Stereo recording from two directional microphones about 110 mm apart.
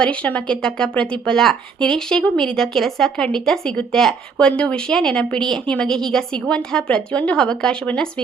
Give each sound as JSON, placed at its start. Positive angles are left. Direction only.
{"t": 0.0, "sound": "speech", "side_deg": 10}